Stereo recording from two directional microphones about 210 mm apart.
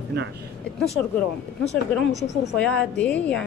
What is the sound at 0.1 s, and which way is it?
Speech, 50° right (ahead or behind).